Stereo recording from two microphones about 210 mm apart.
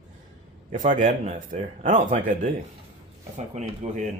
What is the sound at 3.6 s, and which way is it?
Speech, 35° right (ahead or behind).